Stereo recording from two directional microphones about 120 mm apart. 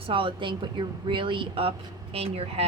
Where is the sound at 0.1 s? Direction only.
45° right (ahead or behind).